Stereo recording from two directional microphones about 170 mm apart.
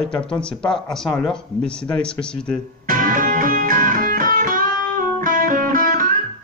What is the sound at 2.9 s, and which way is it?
Music, 50° right (ahead or behind).